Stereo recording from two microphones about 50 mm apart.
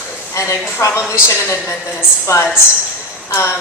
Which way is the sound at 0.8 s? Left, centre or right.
Left.